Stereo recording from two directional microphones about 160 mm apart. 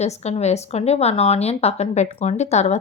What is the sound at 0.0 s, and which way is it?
Speech, 45° left (ahead or behind).